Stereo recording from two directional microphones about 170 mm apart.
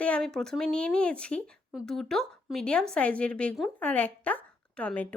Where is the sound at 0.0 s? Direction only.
5° left (ahead or behind).